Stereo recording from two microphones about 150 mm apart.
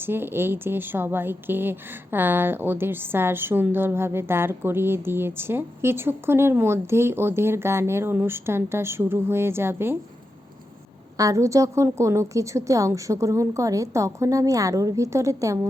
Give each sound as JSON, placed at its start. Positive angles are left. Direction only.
{"t": 0.0, "sound": "speech", "side_deg": -15}
{"t": 11.2, "sound": "a woman's voice", "side_deg": -20}